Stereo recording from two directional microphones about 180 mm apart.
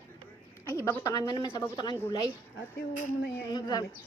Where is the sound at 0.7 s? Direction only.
15° left (ahead or behind).